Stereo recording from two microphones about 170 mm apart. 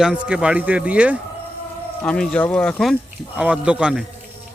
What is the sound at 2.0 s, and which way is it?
Speech, 5° left (ahead or behind).